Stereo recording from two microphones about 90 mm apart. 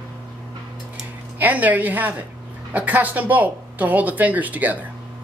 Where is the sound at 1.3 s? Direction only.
20° right (ahead or behind).